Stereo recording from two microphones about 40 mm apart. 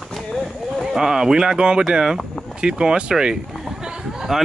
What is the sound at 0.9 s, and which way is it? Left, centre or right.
A man's voice, centre.